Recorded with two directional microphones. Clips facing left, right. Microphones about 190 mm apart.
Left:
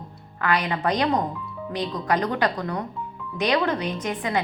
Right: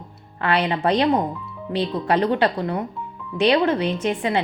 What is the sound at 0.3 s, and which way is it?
A woman's voice, 30° right (ahead or behind).